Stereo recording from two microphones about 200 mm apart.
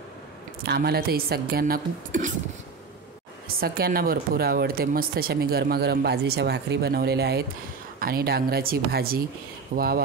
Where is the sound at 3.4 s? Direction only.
50° right (ahead or behind).